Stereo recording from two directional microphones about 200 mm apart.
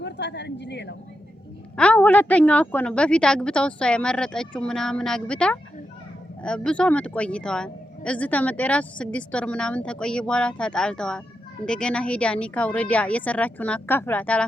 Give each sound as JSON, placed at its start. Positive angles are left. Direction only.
{"t": 0.0, "sound": "a woman's voice", "side_deg": 60}
{"t": 1.7, "sound": "a woman's voice", "side_deg": 5}